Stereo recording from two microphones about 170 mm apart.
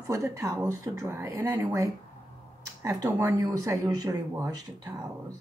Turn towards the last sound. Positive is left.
turn(degrees=-20)  # may be behind; listen again after turning